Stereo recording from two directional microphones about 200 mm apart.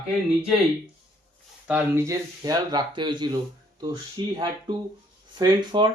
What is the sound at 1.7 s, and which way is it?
Speech, 10° right (ahead or behind).